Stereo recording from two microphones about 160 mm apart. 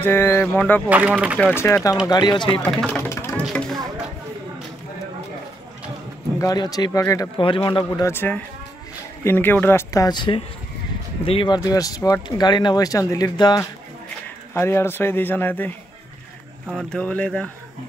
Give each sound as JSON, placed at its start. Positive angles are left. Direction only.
{"t": 0.0, "sound": "speech", "side_deg": 15}
{"t": 0.8, "sound": "speech", "side_deg": -10}
{"t": 1.4, "sound": "speech", "side_deg": 15}
{"t": 2.0, "sound": "speech", "side_deg": 25}
{"t": 2.6, "sound": "a sound", "side_deg": 10}
{"t": 3.4, "sound": "a sound", "side_deg": 0}
{"t": 6.3, "sound": "speech", "side_deg": 25}
{"t": 7.3, "sound": "a man's voice", "side_deg": 30}
{"t": 8.1, "sound": "speech", "side_deg": 15}
{"t": 16.7, "sound": "speech", "side_deg": 5}